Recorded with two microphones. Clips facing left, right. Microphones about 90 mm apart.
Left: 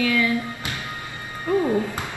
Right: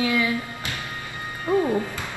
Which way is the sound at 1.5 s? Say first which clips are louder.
Even; 20° right (ahead or behind).